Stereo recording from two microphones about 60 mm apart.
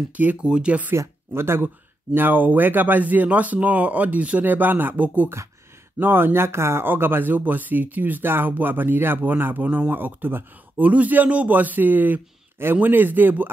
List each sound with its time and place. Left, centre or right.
0.1 s speech: right
0.9 s speech: right
2.1 s speech: right